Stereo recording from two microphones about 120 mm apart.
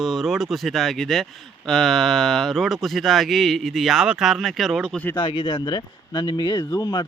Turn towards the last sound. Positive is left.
turn(degrees=35)  # may be behind; listen again after turning